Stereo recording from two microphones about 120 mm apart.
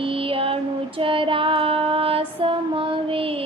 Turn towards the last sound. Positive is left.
turn(degrees=-50)  # may be behind; listen again after turning